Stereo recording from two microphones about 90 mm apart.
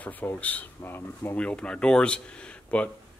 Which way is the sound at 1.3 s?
10° left (ahead or behind).